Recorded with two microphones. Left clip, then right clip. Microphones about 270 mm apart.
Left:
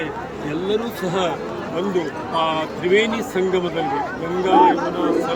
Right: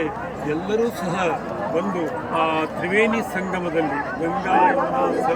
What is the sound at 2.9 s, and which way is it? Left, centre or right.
Speech, centre.